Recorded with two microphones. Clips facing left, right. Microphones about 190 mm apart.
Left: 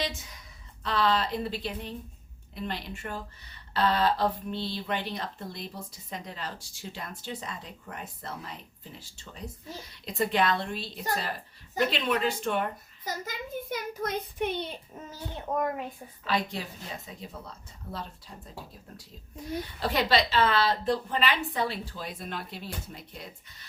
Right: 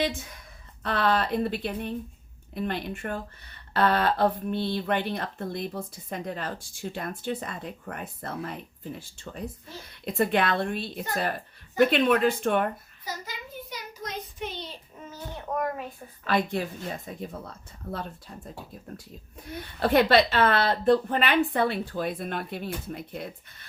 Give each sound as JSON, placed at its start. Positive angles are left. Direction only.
{"t": 0.3, "sound": "a woman's voice", "side_deg": -55}
{"t": 13.1, "sound": "a child's voice", "side_deg": 50}
{"t": 16.2, "sound": "a woman's voice", "side_deg": -55}
{"t": 19.8, "sound": "speech", "side_deg": -55}